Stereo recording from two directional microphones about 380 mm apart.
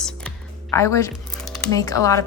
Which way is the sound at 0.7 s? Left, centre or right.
Centre.